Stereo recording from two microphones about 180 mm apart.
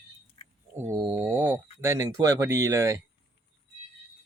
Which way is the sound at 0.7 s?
15° right (ahead or behind).